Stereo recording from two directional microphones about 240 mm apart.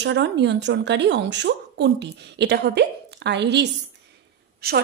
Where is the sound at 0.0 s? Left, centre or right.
Right.